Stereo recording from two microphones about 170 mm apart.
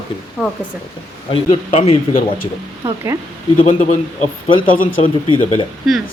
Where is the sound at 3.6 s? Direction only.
40° left (ahead or behind).